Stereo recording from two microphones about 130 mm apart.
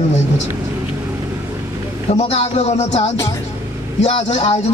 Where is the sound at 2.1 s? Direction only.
55° left (ahead or behind).